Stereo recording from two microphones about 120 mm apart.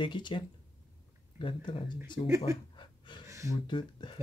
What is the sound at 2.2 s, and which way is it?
Speech, 25° right (ahead or behind).